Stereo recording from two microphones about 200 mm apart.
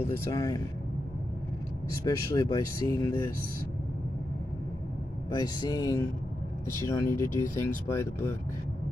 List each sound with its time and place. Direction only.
0.1 s speech: 15° left (ahead or behind)
2.0 s speech: 15° left (ahead or behind)
5.3 s speech: 20° left (ahead or behind)